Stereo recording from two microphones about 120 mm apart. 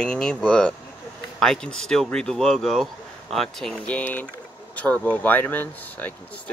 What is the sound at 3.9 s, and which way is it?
Speech, 15° left (ahead or behind).